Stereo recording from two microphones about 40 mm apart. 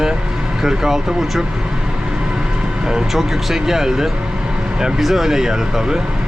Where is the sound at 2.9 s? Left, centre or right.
Centre.